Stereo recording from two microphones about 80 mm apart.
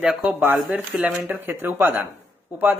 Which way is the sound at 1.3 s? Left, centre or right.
Right.